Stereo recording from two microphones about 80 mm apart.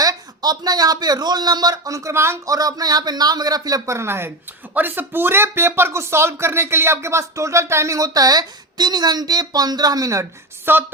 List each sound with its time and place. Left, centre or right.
0.0 s speech: right
2.5 s speech: right
3.8 s speech: right
10.7 s a sound: right